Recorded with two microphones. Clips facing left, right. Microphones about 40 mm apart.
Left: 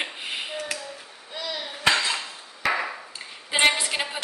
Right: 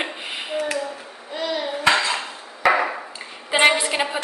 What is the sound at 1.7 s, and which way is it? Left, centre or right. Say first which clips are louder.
Cutlery: right 3 dB; right.